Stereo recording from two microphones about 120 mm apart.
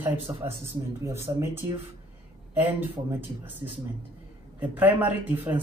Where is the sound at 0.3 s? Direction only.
25° right (ahead or behind).